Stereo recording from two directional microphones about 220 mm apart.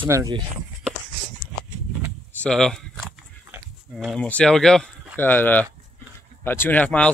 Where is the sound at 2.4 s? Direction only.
Centre (ahead or behind).